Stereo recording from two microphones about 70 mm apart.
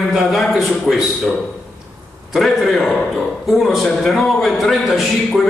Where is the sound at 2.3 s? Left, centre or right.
Centre.